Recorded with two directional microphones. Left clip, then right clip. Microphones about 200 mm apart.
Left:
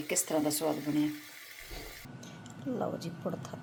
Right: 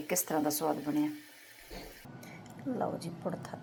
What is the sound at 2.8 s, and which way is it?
Speech, 5° right (ahead or behind).